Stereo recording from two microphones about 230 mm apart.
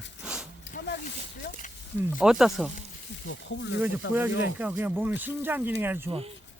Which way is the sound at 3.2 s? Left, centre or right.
Left.